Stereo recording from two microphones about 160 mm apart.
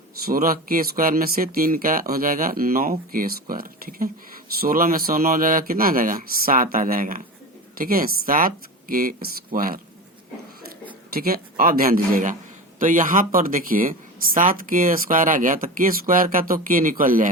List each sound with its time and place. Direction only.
0.3 s speech: 65° right (ahead or behind)
11.1 s speech: 65° right (ahead or behind)